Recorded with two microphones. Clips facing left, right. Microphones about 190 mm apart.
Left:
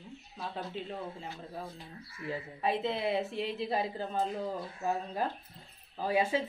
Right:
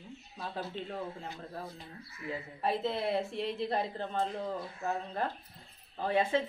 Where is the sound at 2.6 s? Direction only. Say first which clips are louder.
Even; centre (ahead or behind).